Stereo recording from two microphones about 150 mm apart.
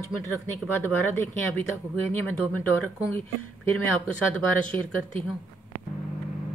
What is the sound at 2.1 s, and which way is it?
Speech, 10° left (ahead or behind).